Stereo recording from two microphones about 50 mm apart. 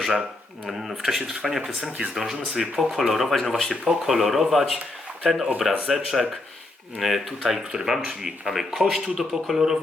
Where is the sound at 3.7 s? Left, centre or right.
Centre.